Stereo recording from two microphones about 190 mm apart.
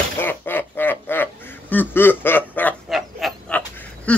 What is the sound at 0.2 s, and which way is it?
Quack, 10° left (ahead or behind).